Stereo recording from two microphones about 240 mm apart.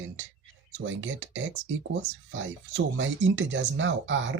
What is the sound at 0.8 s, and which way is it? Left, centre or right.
Speech, right.